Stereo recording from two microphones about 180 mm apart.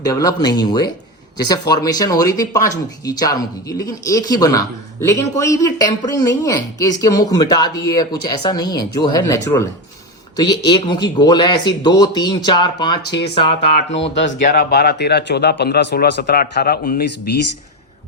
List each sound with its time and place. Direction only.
0.0 s speech: 20° left (ahead or behind)
13.6 s speech: 85° left
14.4 s speech: 60° left (ahead or behind)